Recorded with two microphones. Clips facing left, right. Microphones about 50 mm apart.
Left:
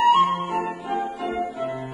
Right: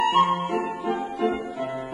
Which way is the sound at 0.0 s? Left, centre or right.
Centre.